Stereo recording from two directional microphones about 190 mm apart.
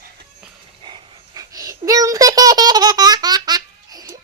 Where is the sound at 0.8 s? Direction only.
20° right (ahead or behind).